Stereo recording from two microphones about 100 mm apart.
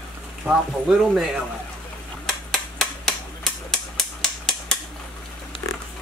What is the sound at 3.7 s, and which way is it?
Typewriter, 5° left (ahead or behind).